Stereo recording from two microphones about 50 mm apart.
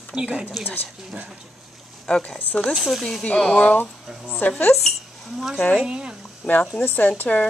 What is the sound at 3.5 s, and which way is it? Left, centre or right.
A woman's voice, left.